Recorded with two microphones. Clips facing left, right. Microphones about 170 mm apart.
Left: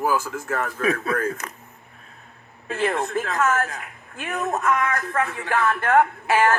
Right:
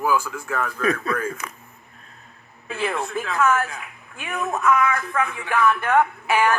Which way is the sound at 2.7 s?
40° left (ahead or behind).